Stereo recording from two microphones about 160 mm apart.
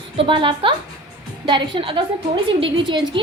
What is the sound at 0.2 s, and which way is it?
A woman's voice, 30° right (ahead or behind).